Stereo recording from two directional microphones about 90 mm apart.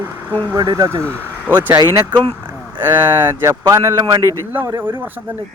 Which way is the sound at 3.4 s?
30° right (ahead or behind).